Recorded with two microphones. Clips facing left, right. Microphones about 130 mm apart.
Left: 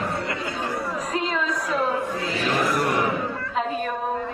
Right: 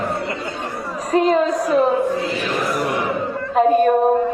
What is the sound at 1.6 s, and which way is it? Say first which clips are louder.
Speech: right 8 dB; 25° right (ahead or behind).